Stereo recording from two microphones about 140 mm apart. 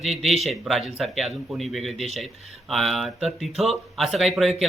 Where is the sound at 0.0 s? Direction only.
Centre (ahead or behind).